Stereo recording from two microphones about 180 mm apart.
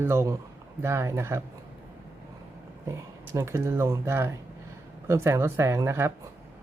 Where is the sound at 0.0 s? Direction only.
15° right (ahead or behind).